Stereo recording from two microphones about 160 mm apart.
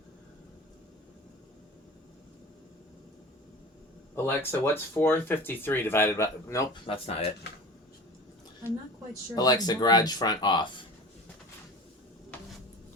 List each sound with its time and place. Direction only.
4.1 s speech: 15° left (ahead or behind)
6.8 s speech: 35° left (ahead or behind)
9.3 s speech: 25° left (ahead or behind)